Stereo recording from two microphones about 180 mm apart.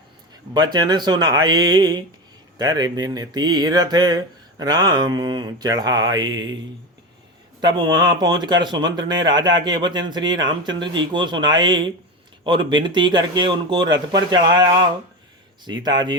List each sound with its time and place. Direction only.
0.5 s speech: 25° right (ahead or behind)
7.6 s speech: 25° right (ahead or behind)